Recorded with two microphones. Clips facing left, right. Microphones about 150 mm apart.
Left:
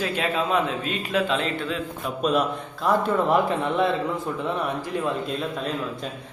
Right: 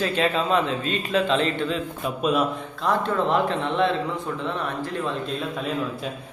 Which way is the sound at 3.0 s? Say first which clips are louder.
Left 1 dB; 10° left (ahead or behind).